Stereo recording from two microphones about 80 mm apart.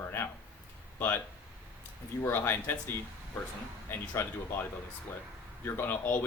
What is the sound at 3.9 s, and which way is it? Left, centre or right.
Speech, left.